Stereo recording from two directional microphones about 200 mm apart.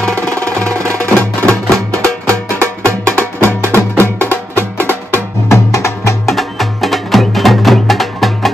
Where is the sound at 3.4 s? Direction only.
10° right (ahead or behind).